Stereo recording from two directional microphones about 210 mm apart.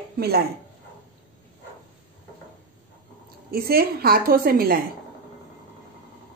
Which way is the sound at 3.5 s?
45° right (ahead or behind).